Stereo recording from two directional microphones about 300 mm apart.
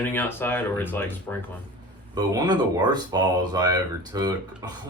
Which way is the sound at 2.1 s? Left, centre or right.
Centre.